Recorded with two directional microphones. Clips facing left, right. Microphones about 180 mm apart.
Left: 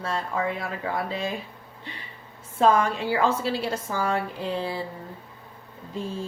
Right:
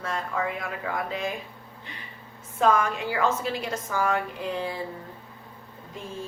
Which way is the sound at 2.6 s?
30° left (ahead or behind).